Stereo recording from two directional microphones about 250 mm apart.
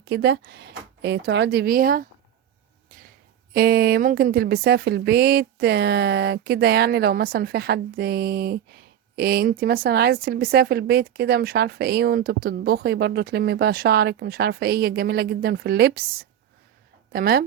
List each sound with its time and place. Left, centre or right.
0.0 s speech: right
3.5 s speech: right